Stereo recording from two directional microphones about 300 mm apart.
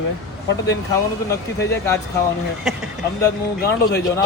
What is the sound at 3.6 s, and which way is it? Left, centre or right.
Speech, left.